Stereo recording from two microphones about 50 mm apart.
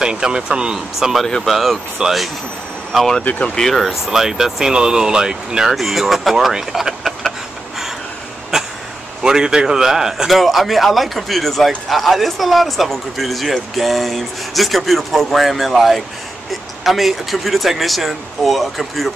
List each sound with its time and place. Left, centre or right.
0.0 s speech: centre
1.2 s a man's voice: centre
3.3 s speech: left
3.6 s speech: centre
7.0 s a sound: centre
8.5 s a sound: centre
9.2 s a man's voice: centre